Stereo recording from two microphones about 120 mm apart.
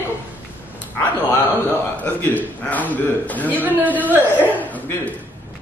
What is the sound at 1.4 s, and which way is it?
A man's voice, 15° left (ahead or behind).